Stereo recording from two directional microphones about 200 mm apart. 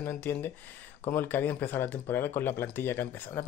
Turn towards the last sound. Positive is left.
turn(degrees=10)  # may be behind; listen again after turning